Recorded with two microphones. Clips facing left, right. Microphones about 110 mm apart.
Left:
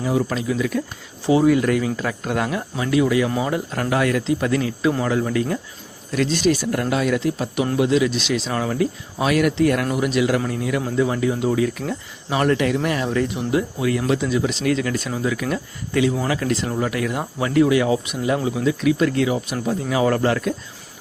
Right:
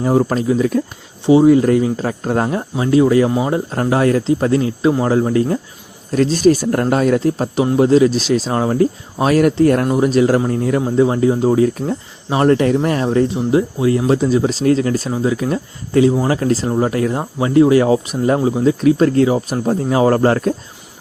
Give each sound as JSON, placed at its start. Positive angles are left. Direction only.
{"t": 0.0, "sound": "speech", "side_deg": -40}
{"t": 1.2, "sound": "speech", "side_deg": -25}
{"t": 3.2, "sound": "speech", "side_deg": -25}